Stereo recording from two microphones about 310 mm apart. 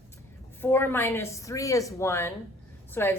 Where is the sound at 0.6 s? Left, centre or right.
Centre.